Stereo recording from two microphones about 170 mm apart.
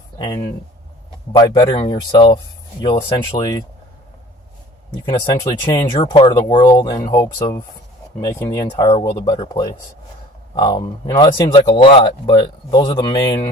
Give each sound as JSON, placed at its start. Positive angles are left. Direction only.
{"t": 0.2, "sound": "speech", "side_deg": 25}
{"t": 5.0, "sound": "speech", "side_deg": 20}